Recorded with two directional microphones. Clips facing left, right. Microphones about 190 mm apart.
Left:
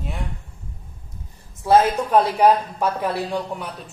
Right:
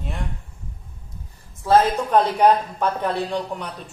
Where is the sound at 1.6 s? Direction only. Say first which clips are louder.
Left 1 dB; 15° left (ahead or behind).